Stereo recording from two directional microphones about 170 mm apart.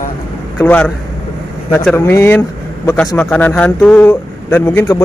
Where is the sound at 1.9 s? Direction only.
15° left (ahead or behind).